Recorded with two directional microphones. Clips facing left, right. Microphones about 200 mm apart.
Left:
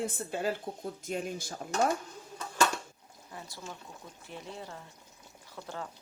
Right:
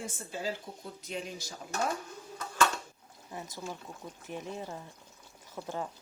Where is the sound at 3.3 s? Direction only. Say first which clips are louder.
Right 4 dB; 20° right (ahead or behind).